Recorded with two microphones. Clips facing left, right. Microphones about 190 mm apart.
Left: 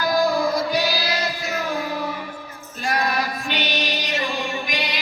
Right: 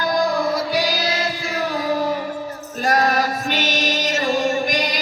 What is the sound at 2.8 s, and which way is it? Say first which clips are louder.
Music: right 5 dB; 45° right (ahead or behind).